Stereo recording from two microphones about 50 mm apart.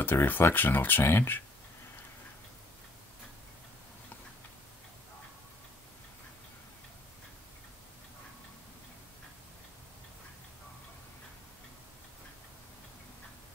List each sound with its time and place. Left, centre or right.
0.0 s speech: left